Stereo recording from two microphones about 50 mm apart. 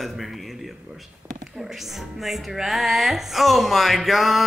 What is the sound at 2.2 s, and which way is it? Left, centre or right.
A woman's voice, centre.